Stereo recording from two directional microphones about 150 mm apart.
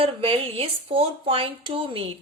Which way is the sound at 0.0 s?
40° right (ahead or behind).